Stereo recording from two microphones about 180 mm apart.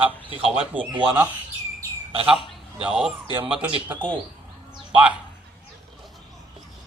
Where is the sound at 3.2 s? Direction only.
25° right (ahead or behind).